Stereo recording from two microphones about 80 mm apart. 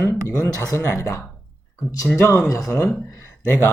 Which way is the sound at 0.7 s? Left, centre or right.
Left.